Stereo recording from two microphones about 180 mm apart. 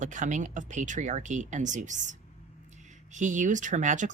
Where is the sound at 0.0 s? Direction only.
45° right (ahead or behind).